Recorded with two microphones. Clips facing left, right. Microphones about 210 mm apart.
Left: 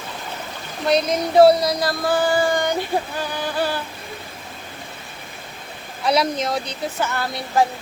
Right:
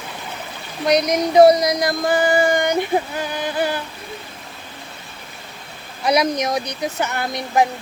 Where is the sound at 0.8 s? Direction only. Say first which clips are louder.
Right 2 dB; 15° right (ahead or behind).